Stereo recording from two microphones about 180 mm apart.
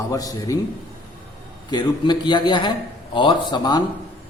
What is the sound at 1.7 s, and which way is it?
A man's voice, 25° left (ahead or behind).